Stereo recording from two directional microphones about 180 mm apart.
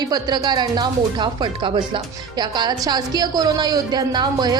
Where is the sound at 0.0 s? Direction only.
20° right (ahead or behind).